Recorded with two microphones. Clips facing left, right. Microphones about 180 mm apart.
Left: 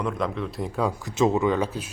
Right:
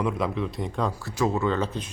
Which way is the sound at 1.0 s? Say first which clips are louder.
Left 5 dB; 20° left (ahead or behind).